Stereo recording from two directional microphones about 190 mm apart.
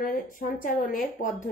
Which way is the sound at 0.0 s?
45° left (ahead or behind).